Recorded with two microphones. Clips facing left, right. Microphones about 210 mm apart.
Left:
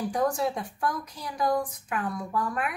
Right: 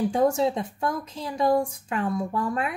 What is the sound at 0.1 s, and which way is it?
A woman's voice, 25° right (ahead or behind).